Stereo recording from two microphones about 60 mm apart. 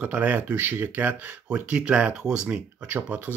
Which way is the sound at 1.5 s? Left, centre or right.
Right.